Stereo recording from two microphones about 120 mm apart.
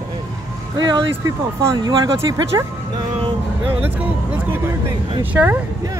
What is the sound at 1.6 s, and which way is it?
Speech, 30° right (ahead or behind).